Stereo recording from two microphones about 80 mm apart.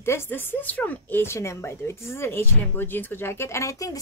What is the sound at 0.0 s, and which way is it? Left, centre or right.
Speech, left.